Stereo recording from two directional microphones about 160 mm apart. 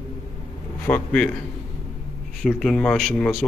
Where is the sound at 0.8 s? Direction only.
10° left (ahead or behind).